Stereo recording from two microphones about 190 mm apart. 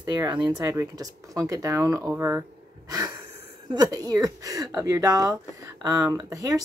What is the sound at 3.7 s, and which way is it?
Speech, 20° right (ahead or behind).